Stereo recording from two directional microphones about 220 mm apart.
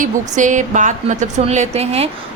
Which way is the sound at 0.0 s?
35° right (ahead or behind).